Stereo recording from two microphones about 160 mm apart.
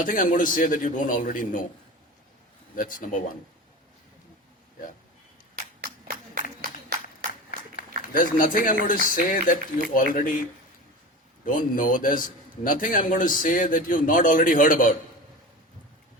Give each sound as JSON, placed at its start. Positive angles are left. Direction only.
{"t": 0.0, "sound": "speech", "side_deg": 55}
{"t": 2.7, "sound": "speech", "side_deg": 55}
{"t": 7.8, "sound": "speech", "side_deg": 55}
{"t": 11.4, "sound": "speech", "side_deg": 60}